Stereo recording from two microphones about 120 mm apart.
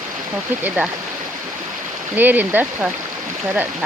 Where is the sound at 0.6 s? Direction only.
10° right (ahead or behind).